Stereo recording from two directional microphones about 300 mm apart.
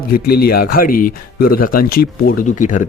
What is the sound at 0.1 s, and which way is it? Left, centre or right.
Speech, left.